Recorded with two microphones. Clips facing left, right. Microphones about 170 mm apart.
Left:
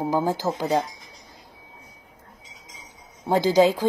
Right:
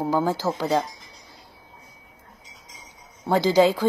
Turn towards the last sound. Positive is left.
turn(degrees=15)  # may be behind; listen again after turning